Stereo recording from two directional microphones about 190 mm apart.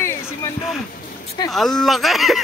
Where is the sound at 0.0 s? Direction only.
15° left (ahead or behind).